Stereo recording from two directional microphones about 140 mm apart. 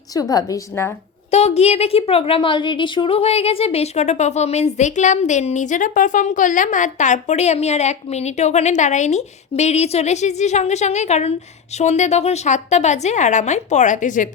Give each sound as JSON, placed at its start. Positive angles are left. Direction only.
{"t": 0.1, "sound": "a woman's voice", "side_deg": 25}
{"t": 1.3, "sound": "a woman's voice", "side_deg": 50}